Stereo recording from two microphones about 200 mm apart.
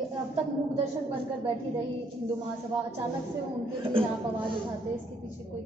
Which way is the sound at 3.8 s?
25° right (ahead or behind).